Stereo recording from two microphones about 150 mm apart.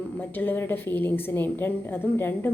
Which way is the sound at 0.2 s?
10° left (ahead or behind).